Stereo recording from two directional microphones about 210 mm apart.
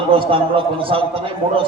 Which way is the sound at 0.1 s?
25° right (ahead or behind).